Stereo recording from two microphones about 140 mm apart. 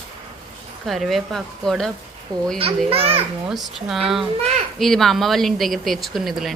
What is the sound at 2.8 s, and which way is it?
Speech, 45° right (ahead or behind).